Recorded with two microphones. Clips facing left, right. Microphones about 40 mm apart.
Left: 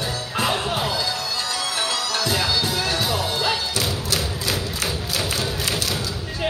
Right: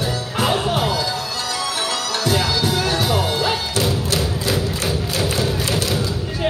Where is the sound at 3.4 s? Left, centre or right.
Centre.